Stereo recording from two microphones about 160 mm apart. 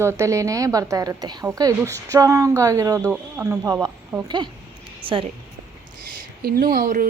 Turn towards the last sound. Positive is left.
turn(degrees=-60)  # may be behind; listen again after turning